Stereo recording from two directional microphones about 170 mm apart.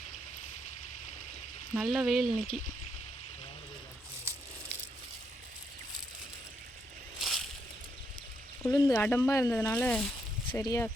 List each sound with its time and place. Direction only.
1.7 s speech: 5° right (ahead or behind)
7.2 s a sound: centre (ahead or behind)
8.6 s speech: 20° left (ahead or behind)